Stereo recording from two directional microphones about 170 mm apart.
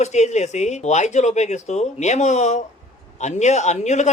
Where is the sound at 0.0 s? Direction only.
40° left (ahead or behind).